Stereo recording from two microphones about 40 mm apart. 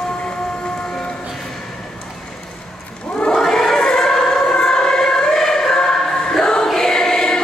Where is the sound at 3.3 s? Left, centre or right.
Centre.